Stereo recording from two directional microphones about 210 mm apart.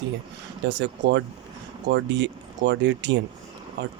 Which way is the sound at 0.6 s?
55° right (ahead or behind).